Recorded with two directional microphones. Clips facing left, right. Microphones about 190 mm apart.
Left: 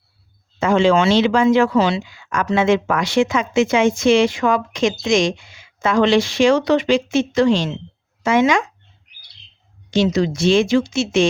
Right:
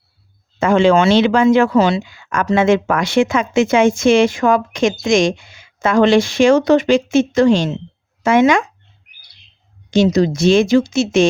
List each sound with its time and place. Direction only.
0.6 s speech: 55° right (ahead or behind)
9.9 s speech: 45° right (ahead or behind)